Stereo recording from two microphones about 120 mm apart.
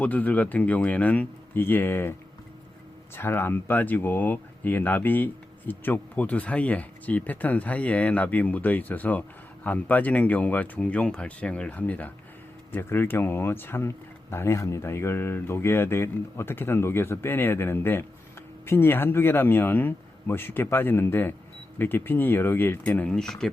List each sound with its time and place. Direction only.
0.0 s speech: 15° left (ahead or behind)
3.2 s speech: 20° left (ahead or behind)